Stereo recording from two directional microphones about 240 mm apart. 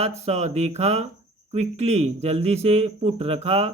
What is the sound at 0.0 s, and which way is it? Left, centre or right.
Speech, right.